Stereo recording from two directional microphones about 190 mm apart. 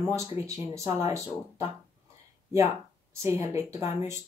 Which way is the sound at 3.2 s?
15° right (ahead or behind).